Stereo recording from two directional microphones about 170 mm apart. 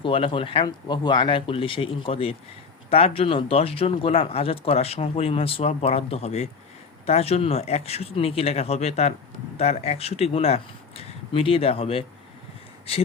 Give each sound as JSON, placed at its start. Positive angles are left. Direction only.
{"t": 0.0, "sound": "speech", "side_deg": 30}